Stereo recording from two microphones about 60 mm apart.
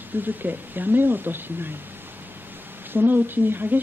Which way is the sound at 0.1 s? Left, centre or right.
Right.